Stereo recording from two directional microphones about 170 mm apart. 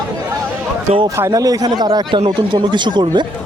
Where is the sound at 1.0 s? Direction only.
20° right (ahead or behind).